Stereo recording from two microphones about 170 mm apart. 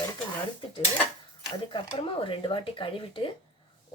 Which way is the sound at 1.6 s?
30° left (ahead or behind).